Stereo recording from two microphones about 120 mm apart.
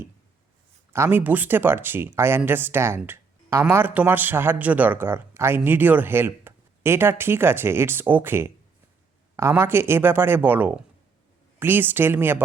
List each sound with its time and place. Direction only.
0.9 s speech: 20° right (ahead or behind)